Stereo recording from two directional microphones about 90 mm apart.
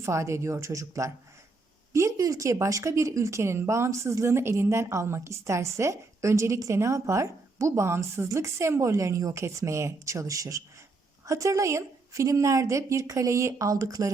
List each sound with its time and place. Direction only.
0.0 s speech: 35° right (ahead or behind)